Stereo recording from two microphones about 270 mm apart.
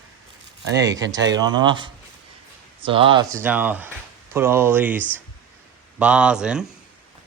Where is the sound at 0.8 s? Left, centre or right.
Centre.